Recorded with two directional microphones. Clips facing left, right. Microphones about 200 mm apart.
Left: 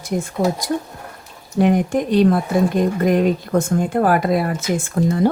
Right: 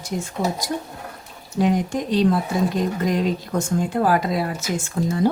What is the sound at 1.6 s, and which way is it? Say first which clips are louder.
Speech: left 4 dB; 55° left (ahead or behind).